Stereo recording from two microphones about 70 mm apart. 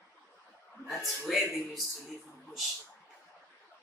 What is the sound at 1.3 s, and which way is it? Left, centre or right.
Speech, centre.